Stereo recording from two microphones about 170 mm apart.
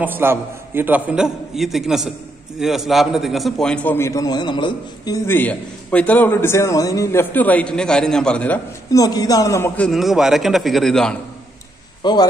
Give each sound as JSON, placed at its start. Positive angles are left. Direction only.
{"t": 0.0, "sound": "a man's voice", "side_deg": -10}
{"t": 8.9, "sound": "a man's voice", "side_deg": 20}
{"t": 9.8, "sound": "a man's voice", "side_deg": 0}
{"t": 12.0, "sound": "a man's voice", "side_deg": 25}